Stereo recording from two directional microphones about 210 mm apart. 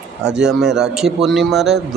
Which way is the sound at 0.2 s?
5° right (ahead or behind).